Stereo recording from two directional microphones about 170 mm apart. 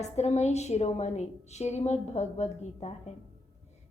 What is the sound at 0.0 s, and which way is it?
A woman's voice, 40° left (ahead or behind).